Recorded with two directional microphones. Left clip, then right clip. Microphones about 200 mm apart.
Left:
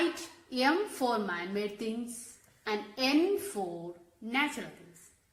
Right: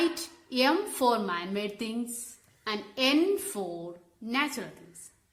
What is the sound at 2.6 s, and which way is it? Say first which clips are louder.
Speech: right 3 dB; 45° right (ahead or behind).